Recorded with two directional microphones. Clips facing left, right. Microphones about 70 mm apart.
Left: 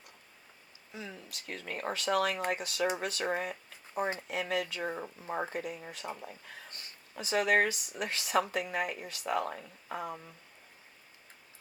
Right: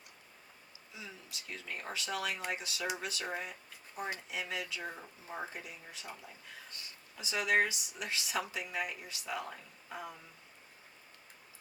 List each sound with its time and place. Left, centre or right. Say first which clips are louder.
0.9 s speech: left 5 dB; left
4.8 s speech: left 7 dB; left